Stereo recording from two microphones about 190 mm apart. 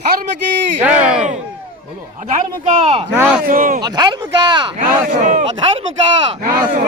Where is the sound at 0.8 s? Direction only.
10° right (ahead or behind).